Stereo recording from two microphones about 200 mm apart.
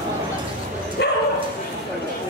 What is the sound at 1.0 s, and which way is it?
Bow-wow, 55° left (ahead or behind).